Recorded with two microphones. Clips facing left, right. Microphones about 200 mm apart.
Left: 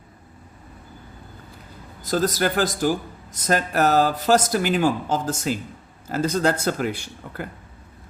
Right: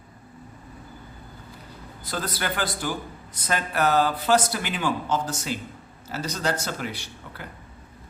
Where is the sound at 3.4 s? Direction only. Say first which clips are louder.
Left 4 dB; 45° left (ahead or behind).